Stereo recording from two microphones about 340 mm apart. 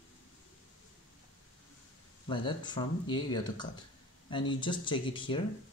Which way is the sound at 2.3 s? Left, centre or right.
Centre.